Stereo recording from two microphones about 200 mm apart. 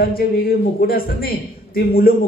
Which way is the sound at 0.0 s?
45° left (ahead or behind).